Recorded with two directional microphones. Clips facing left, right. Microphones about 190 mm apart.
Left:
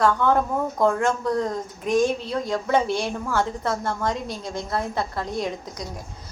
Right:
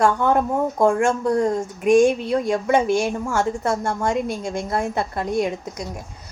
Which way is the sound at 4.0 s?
10° right (ahead or behind).